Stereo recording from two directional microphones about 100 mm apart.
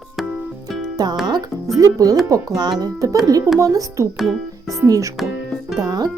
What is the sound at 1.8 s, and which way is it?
Music, 40° right (ahead or behind).